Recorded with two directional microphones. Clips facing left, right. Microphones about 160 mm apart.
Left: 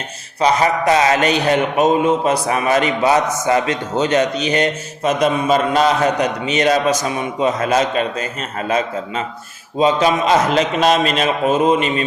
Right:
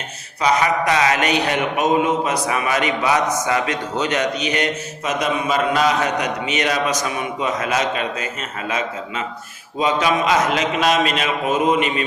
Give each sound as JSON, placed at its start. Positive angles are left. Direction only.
{"t": 0.3, "sound": "a man's voice", "side_deg": 30}
{"t": 9.7, "sound": "a man's voice", "side_deg": 30}